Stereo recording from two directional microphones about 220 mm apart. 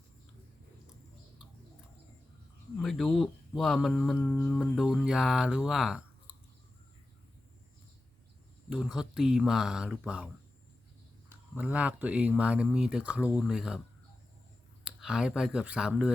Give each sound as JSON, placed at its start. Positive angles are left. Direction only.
{"t": 2.7, "sound": "speech", "side_deg": 0}
{"t": 8.7, "sound": "speech", "side_deg": 0}
{"t": 11.5, "sound": "speech", "side_deg": -5}
{"t": 14.8, "sound": "speech", "side_deg": -5}